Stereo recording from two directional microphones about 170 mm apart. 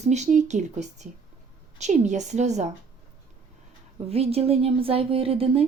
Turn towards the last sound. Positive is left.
turn(degrees=-35)  # may be behind; listen again after turning